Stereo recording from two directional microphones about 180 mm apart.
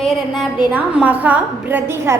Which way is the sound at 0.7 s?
5° right (ahead or behind).